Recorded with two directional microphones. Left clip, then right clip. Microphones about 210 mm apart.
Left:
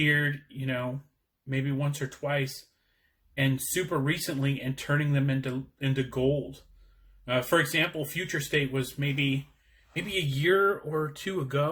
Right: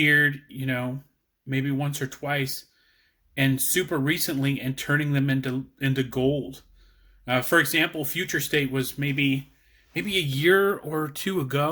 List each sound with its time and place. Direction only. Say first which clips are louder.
0.0 s speech: right 6 dB; 35° right (ahead or behind)